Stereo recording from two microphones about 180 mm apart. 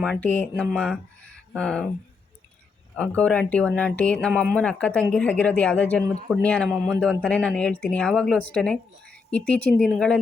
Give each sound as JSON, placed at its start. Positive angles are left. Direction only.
{"t": 0.0, "sound": "speech", "side_deg": 5}
{"t": 2.9, "sound": "speech", "side_deg": 5}